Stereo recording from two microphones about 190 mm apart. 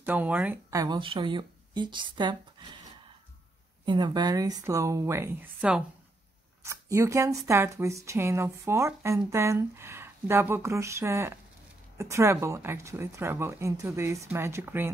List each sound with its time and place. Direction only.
0.0 s speech: 10° right (ahead or behind)
3.8 s speech: 25° right (ahead or behind)